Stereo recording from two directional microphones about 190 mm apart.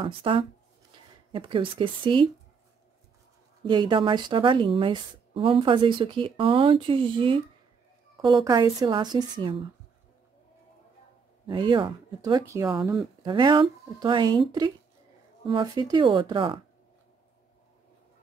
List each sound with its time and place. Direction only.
0.0 s speech: 30° right (ahead or behind)
3.6 s speech: 25° right (ahead or behind)
11.4 s speech: 25° right (ahead or behind)